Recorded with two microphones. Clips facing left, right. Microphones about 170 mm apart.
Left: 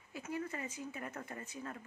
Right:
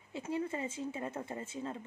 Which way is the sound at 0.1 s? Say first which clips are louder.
Right 5 dB; 25° right (ahead or behind).